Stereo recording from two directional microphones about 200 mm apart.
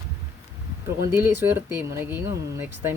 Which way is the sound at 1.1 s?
10° right (ahead or behind).